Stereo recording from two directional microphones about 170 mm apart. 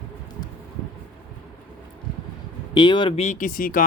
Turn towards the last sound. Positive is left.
turn(degrees=55)  # may be behind; listen again after turning